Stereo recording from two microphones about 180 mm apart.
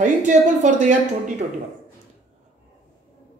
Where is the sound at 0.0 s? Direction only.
40° right (ahead or behind).